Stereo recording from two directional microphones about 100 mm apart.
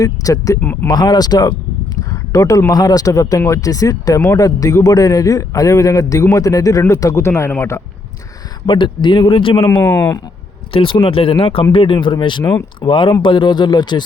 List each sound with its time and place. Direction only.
0.0 s a man's voice: 35° left (ahead or behind)
0.6 s speech: 15° left (ahead or behind)
0.9 s a man's voice: 45° left (ahead or behind); by 7.5 s 25° left (ahead or behind)
8.6 s speech: 50° left (ahead or behind)
9.3 s speech: 60° left (ahead or behind)
9.8 s speech: 30° left (ahead or behind)
10.7 s speech: 65° left (ahead or behind); by 14.0 s 50° left (ahead or behind)